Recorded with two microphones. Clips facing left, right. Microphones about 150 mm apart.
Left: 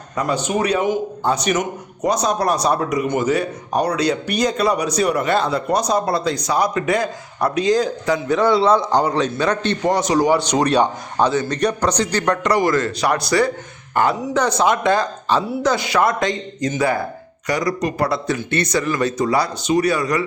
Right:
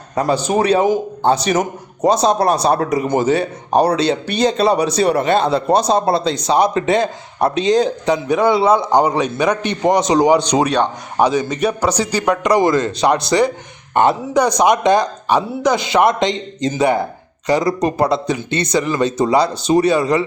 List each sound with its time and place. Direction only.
0.2 s a man's voice: 35° right (ahead or behind)